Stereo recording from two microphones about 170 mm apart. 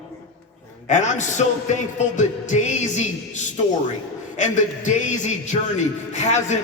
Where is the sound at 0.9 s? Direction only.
45° left (ahead or behind).